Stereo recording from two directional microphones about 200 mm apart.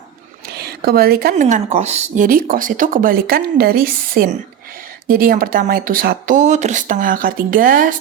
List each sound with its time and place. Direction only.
0.5 s speech: 50° right (ahead or behind)